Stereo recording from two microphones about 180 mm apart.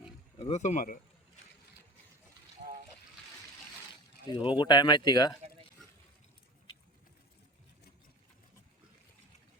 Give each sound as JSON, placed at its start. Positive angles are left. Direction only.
{"t": 0.3, "sound": "speech", "side_deg": 35}
{"t": 2.6, "sound": "water", "side_deg": -45}
{"t": 4.3, "sound": "speech", "side_deg": 25}